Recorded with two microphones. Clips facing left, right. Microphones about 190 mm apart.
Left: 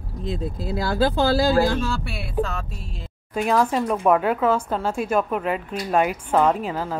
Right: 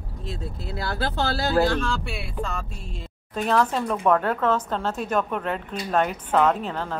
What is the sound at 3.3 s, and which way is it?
Speech, 10° left (ahead or behind).